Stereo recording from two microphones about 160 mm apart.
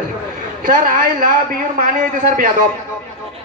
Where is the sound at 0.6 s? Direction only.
65° right (ahead or behind).